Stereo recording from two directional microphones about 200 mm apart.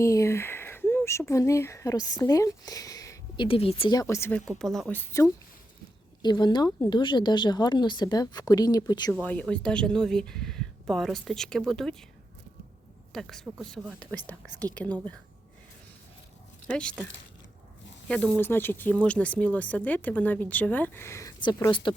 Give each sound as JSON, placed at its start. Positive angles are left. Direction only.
{"t": 0.0, "sound": "a sound", "side_deg": 15}
{"t": 1.3, "sound": "speech", "side_deg": 15}
{"t": 9.2, "sound": "speech", "side_deg": 5}
{"t": 13.1, "sound": "speech", "side_deg": 0}
{"t": 16.6, "sound": "speech", "side_deg": 5}
{"t": 18.1, "sound": "speech", "side_deg": 5}